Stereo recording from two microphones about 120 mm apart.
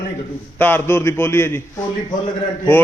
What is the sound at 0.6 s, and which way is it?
A man's voice, 15° left (ahead or behind).